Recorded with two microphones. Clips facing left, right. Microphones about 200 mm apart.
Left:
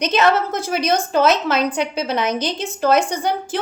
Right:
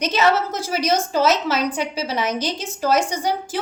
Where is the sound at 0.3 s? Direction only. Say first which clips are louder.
Left 2 dB; 55° left (ahead or behind).